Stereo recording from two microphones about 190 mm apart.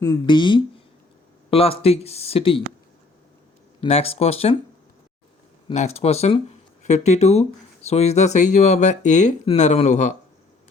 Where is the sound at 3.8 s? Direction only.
30° left (ahead or behind).